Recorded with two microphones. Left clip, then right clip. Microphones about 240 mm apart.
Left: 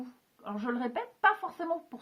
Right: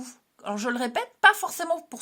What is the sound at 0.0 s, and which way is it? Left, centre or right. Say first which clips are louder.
A woman's voice: right 7 dB; right.